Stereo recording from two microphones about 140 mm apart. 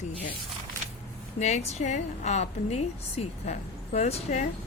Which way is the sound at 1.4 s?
55° left (ahead or behind).